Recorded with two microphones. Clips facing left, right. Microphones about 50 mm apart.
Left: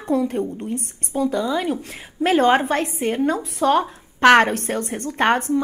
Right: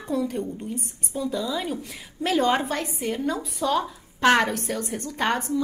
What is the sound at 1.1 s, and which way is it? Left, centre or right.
A woman's voice, left.